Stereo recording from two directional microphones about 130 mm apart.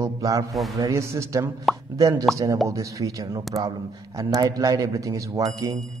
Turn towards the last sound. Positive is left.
turn(degrees=-25)  # may be behind; listen again after turning